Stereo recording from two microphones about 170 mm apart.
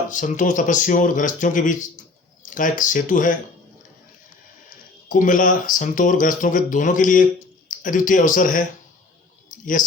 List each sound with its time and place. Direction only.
0.1 s speech: 50° left (ahead or behind)
5.0 s speech: 50° left (ahead or behind)